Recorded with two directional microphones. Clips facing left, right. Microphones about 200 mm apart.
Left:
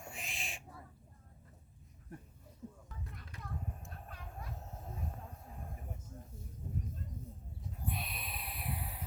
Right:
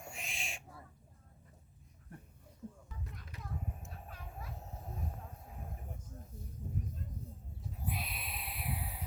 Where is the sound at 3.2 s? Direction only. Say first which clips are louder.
Right 1 dB; centre (ahead or behind).